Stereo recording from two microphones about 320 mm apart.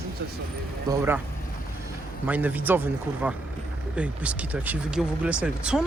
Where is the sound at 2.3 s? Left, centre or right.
Centre.